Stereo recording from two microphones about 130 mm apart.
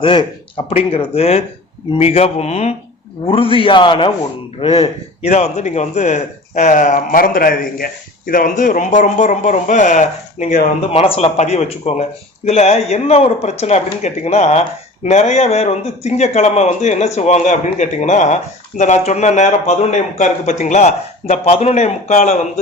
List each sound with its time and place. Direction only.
0.0 s a man's voice: 40° left (ahead or behind)
3.2 s a man's voice: 45° left (ahead or behind); by 10.6 s 70° left (ahead or behind)
10.9 s a man's voice: 45° left (ahead or behind); by 22.6 s 65° left (ahead or behind)